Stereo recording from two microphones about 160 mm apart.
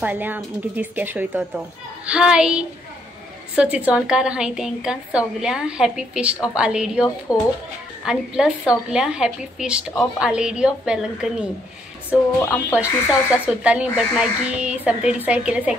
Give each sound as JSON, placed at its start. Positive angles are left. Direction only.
{"t": 0.0, "sound": "a woman's voice", "side_deg": -10}
{"t": 7.3, "sound": "speech", "side_deg": 20}
{"t": 8.0, "sound": "a woman's voice", "side_deg": -5}
{"t": 12.4, "sound": "speech", "side_deg": 10}
{"t": 12.7, "sound": "speech", "side_deg": -5}